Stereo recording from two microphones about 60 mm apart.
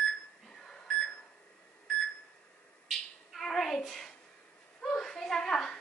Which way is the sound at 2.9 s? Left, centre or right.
Centre.